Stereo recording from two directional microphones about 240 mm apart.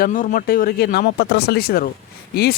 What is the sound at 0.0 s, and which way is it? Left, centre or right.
Speech, left.